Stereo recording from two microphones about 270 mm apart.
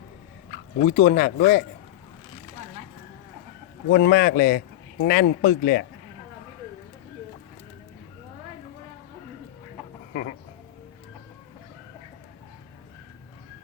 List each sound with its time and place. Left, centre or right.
0.8 s speech: left
3.8 s speech: left
10.1 s chicken: left